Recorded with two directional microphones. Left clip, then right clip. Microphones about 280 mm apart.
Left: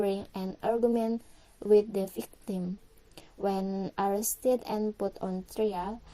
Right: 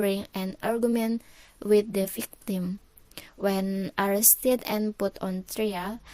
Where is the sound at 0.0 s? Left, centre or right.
Right.